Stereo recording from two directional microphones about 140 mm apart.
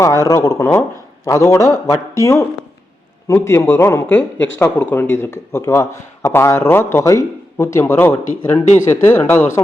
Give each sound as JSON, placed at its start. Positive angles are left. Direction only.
{"t": 0.0, "sound": "a man's voice", "side_deg": 20}